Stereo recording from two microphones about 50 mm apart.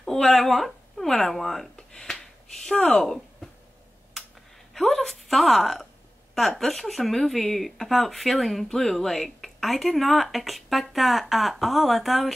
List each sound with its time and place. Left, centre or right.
0.0 s speech: centre
1.8 s a sound: centre
2.6 s speech: centre
4.7 s a woman's voice: centre